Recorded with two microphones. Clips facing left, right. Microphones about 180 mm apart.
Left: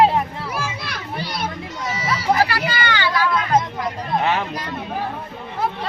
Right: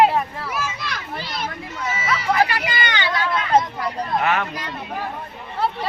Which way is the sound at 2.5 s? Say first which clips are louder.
Left 2 dB; 20° right (ahead or behind).